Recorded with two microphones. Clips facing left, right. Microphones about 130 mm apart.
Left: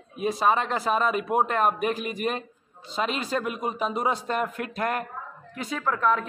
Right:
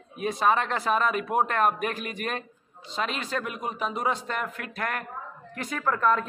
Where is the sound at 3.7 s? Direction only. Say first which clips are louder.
Even; 30° left (ahead or behind).